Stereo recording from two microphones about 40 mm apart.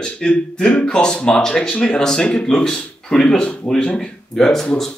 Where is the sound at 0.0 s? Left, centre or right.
Left.